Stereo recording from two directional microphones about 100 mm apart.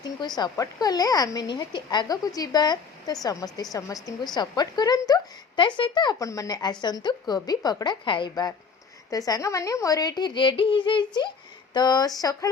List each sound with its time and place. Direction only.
0.5 s speech: 35° left (ahead or behind)
5.5 s speech: 55° left (ahead or behind)
6.1 s speech: 35° left (ahead or behind); by 8.4 s 55° left (ahead or behind)
9.0 s speech: 35° left (ahead or behind)